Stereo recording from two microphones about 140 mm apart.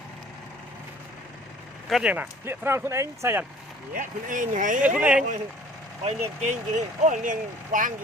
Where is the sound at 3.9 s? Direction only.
70° right (ahead or behind).